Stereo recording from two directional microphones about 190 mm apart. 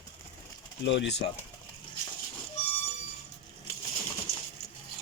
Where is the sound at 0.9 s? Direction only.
65° left (ahead or behind).